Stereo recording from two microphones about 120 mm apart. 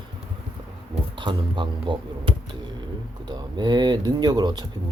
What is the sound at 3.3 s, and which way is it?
Speech, 35° right (ahead or behind).